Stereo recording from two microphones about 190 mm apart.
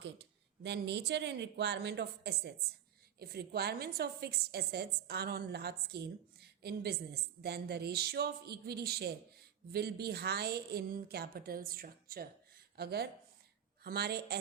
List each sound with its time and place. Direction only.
0.0 s a woman's voice: 65° right (ahead or behind)